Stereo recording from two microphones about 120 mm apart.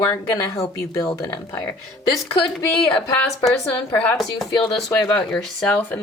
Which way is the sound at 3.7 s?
10° left (ahead or behind).